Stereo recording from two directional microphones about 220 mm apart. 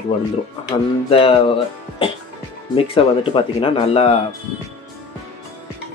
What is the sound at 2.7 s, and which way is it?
Speech, 25° left (ahead or behind).